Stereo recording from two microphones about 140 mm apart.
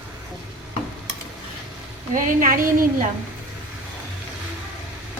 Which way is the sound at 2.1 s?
75° right (ahead or behind).